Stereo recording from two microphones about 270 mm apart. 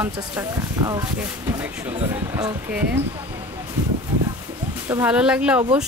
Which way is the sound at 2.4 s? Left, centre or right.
Centre.